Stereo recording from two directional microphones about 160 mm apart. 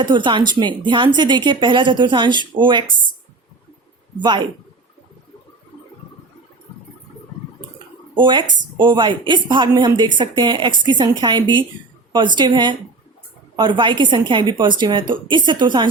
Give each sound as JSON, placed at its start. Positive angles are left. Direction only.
{"t": 0.0, "sound": "speech", "side_deg": -30}
{"t": 4.2, "sound": "speech", "side_deg": -30}
{"t": 8.1, "sound": "a woman's voice", "side_deg": -30}